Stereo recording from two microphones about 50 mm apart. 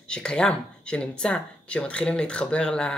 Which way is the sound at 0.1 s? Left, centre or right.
Centre.